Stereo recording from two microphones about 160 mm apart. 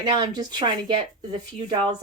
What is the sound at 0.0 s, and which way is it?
A woman's voice, 25° right (ahead or behind).